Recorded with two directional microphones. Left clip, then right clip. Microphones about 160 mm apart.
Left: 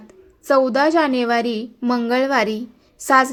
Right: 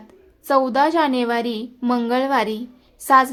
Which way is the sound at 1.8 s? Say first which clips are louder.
Even; 5° right (ahead or behind).